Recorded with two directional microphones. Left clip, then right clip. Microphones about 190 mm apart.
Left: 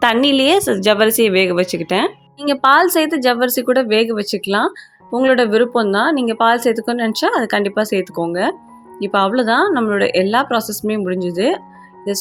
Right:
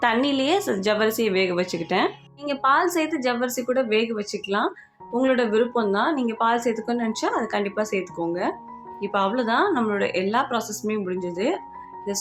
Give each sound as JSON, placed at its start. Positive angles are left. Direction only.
{"t": 0.0, "sound": "speech", "side_deg": 45}